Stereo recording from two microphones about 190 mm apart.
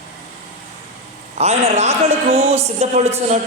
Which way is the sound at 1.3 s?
35° right (ahead or behind).